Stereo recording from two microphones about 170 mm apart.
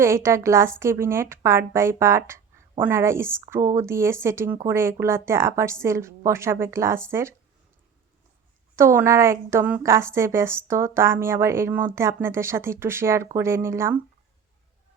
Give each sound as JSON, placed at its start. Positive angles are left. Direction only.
{"t": 0.0, "sound": "a woman's voice", "side_deg": -15}
{"t": 8.7, "sound": "a woman's voice", "side_deg": -15}